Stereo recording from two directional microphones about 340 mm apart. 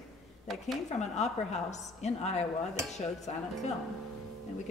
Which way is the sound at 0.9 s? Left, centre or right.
Centre.